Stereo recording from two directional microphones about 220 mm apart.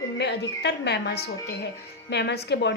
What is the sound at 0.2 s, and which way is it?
A woman's voice, 50° left (ahead or behind).